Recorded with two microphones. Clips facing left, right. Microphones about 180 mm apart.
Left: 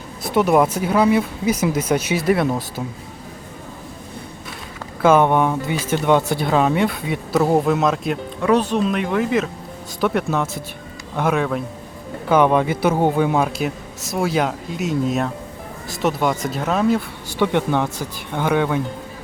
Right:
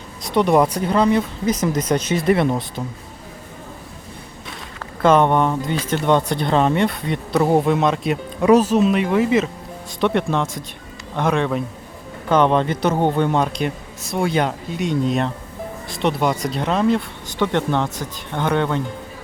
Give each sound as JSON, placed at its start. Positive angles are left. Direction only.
{"t": 0.2, "sound": "speech", "side_deg": 5}
{"t": 5.0, "sound": "speech", "side_deg": 10}
{"t": 8.4, "sound": "speech", "side_deg": -15}
{"t": 8.7, "sound": "speech", "side_deg": -5}